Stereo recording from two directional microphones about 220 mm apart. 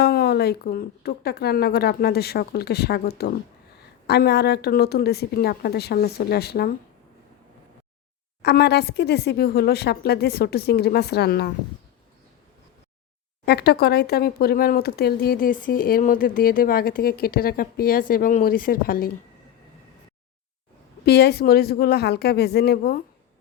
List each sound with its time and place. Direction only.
0.0 s speech: 45° left (ahead or behind)
8.4 s speech: 50° left (ahead or behind)
13.4 s a woman's voice: 45° left (ahead or behind)
21.0 s speech: 45° left (ahead or behind)